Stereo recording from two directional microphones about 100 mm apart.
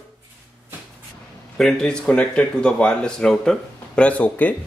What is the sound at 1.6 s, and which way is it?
Speech, 5° left (ahead or behind).